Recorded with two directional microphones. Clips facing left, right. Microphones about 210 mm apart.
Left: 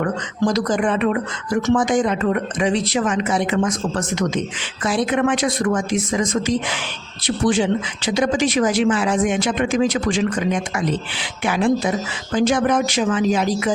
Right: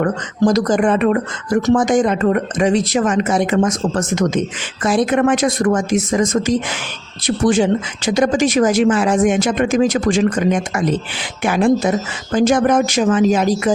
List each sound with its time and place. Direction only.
0.0 s speech: 45° right (ahead or behind)